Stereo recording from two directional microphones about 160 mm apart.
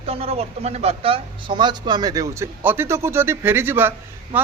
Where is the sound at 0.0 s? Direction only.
40° right (ahead or behind).